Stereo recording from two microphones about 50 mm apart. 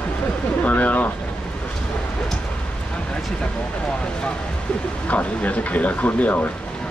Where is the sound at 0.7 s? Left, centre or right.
Left.